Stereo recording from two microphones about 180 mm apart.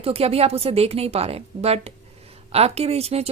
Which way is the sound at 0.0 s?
35° right (ahead or behind).